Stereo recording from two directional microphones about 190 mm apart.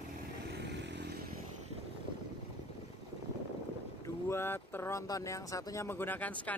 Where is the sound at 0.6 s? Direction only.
65° right (ahead or behind).